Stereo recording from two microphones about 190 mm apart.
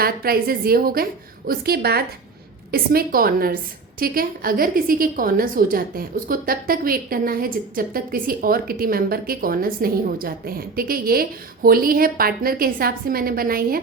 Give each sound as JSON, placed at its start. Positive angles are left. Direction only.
{"t": 0.0, "sound": "a woman's voice", "side_deg": -50}